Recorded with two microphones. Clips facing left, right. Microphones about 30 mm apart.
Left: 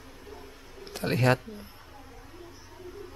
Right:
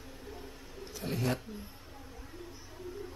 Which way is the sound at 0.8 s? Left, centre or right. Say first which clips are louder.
Left 9 dB; left.